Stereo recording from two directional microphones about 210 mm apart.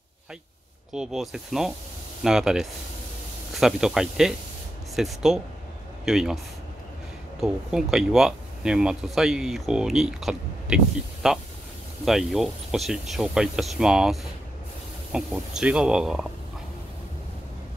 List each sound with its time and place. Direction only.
0.9 s speech: centre (ahead or behind)
15.1 s speech: 5° right (ahead or behind)